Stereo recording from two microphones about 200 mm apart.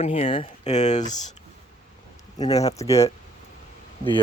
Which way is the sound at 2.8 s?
15° left (ahead or behind).